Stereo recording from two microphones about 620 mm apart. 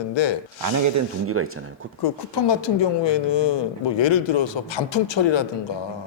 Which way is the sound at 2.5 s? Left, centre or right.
Left.